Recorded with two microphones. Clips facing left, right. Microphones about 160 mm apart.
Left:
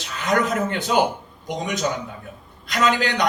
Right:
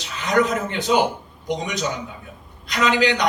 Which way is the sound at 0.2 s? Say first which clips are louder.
Right 1 dB; 50° left (ahead or behind).